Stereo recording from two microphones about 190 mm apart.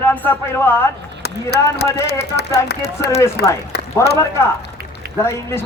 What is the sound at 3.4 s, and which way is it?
Speech, 60° left (ahead or behind).